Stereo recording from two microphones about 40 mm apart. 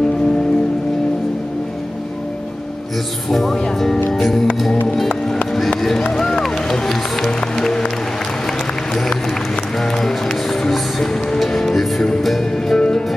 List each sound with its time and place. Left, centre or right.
3.3 s speech: centre
5.8 s run: centre
7.2 s music: centre
10.0 s music: centre
12.7 s music: centre